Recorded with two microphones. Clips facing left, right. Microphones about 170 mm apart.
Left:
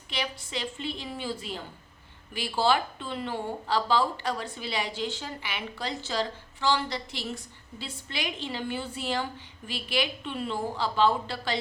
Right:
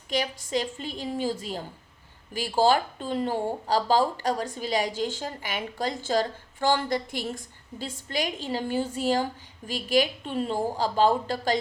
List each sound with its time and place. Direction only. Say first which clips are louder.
0.1 s a woman's voice: right 6 dB; 45° right (ahead or behind)